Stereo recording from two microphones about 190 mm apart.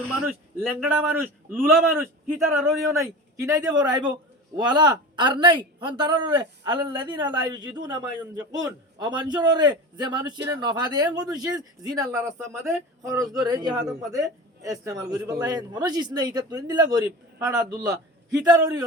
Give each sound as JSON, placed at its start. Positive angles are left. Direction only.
{"t": 0.8, "sound": "a man's voice", "side_deg": -10}